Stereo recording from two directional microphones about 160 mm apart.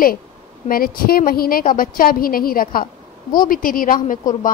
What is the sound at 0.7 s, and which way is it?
A woman's voice, 65° left (ahead or behind).